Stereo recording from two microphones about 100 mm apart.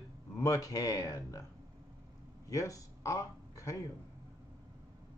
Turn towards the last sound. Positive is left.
turn(degrees=35)  # may be behind; listen again after turning